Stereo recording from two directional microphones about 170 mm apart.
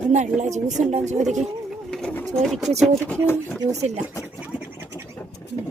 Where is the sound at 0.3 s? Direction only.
45° right (ahead or behind).